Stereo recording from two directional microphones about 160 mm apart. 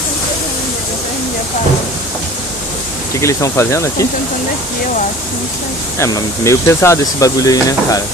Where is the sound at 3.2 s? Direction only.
20° left (ahead or behind).